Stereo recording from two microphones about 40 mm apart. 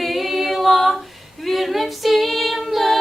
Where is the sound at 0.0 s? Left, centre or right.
Centre.